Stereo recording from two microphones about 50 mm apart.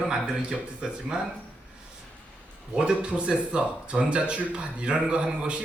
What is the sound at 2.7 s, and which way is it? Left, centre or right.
A man's voice, centre.